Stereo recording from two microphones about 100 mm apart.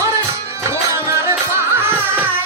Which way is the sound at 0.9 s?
30° right (ahead or behind).